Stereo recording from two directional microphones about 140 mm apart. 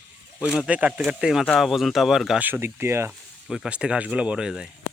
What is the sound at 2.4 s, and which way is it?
Speech, 15° right (ahead or behind).